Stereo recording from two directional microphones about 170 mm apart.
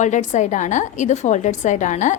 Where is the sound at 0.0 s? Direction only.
45° left (ahead or behind).